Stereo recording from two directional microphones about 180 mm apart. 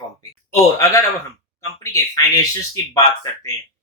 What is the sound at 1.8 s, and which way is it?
Speech, 20° left (ahead or behind).